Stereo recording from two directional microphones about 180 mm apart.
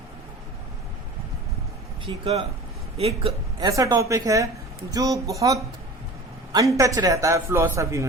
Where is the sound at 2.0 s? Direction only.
30° right (ahead or behind).